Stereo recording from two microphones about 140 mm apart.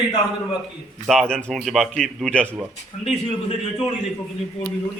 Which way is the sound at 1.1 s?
5° left (ahead or behind).